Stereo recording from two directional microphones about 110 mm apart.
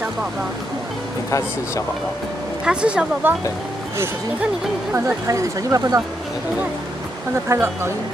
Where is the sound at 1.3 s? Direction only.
30° left (ahead or behind).